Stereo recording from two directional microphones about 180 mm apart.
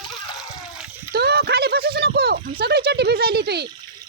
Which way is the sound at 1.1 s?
65° right (ahead or behind).